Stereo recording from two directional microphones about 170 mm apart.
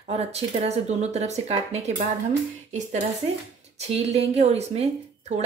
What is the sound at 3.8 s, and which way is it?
Speech, 40° right (ahead or behind).